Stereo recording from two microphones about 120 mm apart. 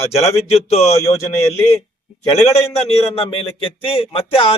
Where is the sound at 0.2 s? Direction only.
60° left (ahead or behind).